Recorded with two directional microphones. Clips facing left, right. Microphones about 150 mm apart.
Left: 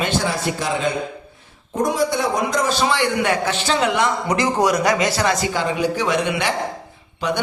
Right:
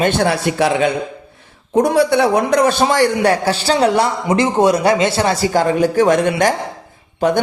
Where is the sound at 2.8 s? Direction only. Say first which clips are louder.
Right 5 dB; 40° right (ahead or behind).